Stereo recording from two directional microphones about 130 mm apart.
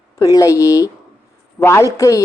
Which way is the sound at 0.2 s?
25° left (ahead or behind).